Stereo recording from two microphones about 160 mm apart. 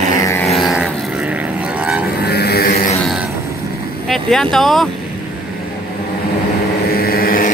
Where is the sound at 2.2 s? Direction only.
85° left.